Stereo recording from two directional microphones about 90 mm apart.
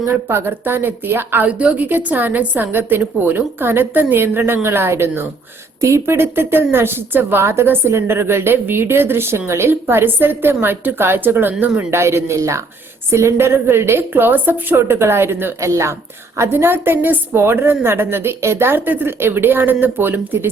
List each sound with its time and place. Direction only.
0.1 s a woman's voice: 25° right (ahead or behind)